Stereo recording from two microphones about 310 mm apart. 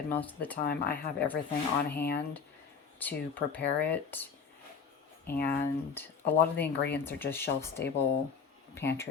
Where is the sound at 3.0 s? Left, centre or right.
Centre.